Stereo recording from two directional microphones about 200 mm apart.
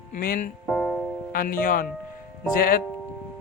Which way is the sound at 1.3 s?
45° left (ahead or behind).